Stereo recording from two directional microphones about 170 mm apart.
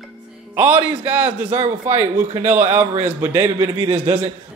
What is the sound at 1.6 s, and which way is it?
Speech, 40° right (ahead or behind).